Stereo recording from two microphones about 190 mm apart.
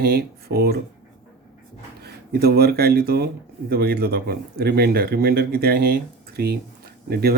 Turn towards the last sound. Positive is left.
turn(degrees=-55)  # may be behind; listen again after turning